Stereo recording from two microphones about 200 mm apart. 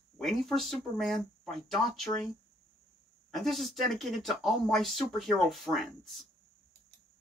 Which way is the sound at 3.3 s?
Centre (ahead or behind).